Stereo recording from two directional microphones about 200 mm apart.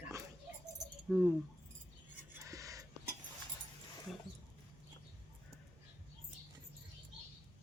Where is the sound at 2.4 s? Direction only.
15° right (ahead or behind).